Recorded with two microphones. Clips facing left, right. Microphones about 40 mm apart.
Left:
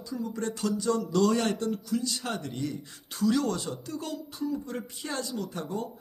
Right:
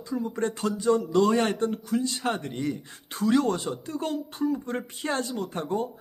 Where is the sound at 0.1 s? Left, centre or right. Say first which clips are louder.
Right 4 dB; right.